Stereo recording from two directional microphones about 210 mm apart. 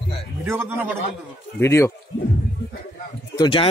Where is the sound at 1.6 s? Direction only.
15° left (ahead or behind).